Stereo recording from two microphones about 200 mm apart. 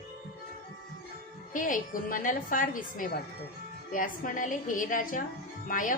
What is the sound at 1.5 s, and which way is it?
A woman's voice, 40° left (ahead or behind).